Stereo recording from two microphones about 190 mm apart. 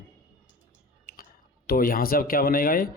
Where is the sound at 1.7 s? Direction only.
50° left (ahead or behind).